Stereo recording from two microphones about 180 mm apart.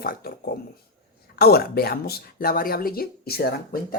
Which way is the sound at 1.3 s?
60° left (ahead or behind).